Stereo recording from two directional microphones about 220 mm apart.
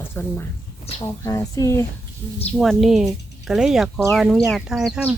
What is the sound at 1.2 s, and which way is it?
Speech, 15° left (ahead or behind).